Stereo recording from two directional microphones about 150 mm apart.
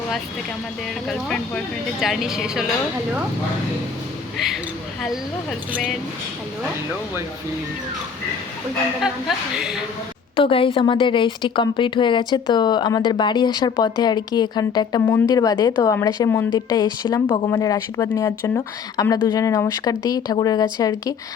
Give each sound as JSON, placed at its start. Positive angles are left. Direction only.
{"t": 1.0, "sound": "speech", "side_deg": 0}
{"t": 9.0, "sound": "speech", "side_deg": -5}
{"t": 10.3, "sound": "a woman's voice", "side_deg": 35}